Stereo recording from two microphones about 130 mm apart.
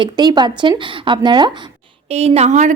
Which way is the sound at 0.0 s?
35° right (ahead or behind).